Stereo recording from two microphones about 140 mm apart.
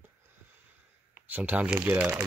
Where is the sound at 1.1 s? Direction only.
10° right (ahead or behind).